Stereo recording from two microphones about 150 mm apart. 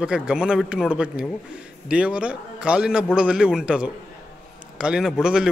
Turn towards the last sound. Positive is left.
turn(degrees=-5)  # may be behind; listen again after turning